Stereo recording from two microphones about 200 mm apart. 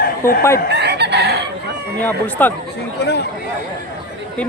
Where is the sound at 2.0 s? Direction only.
10° left (ahead or behind).